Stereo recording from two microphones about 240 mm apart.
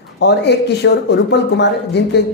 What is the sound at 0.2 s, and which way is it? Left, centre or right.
Speech, left.